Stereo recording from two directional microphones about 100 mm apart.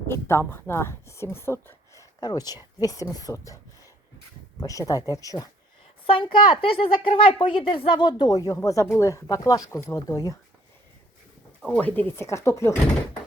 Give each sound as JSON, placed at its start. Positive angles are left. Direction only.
{"t": 0.1, "sound": "a woman's voice", "side_deg": 25}
{"t": 2.2, "sound": "speech", "side_deg": 40}
{"t": 4.6, "sound": "speech", "side_deg": 35}
{"t": 6.1, "sound": "a woman's voice", "side_deg": 60}
{"t": 11.7, "sound": "speech", "side_deg": 15}
{"t": 12.2, "sound": "a woman's voice", "side_deg": 30}